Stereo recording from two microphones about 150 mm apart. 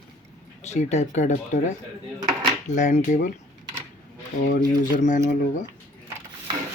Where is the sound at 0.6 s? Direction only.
50° left (ahead or behind).